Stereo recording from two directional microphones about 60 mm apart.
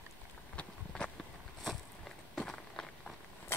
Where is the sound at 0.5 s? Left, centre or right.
Centre.